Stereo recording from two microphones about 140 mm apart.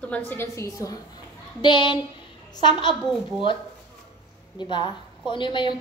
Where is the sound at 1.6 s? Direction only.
35° left (ahead or behind).